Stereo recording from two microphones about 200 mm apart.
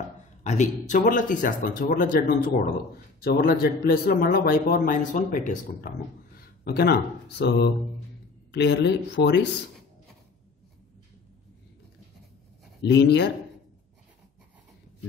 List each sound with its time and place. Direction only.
0.4 s speech: 35° left (ahead or behind); by 9.5 s 60° left (ahead or behind)
12.8 s speech: 55° left (ahead or behind)